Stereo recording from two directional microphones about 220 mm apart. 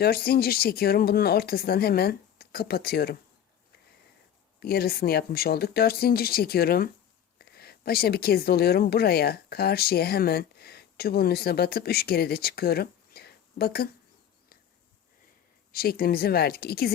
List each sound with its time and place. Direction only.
0.0 s speech: 45° left (ahead or behind)
4.6 s a woman's voice: 45° left (ahead or behind)
15.7 s speech: 45° left (ahead or behind)